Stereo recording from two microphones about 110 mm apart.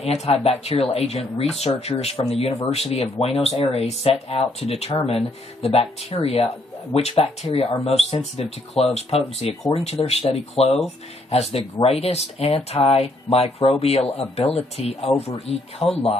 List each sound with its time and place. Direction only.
0.0 s speech: 75° left (ahead or behind)